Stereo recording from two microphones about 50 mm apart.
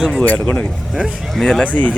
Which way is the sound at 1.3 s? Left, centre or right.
Centre.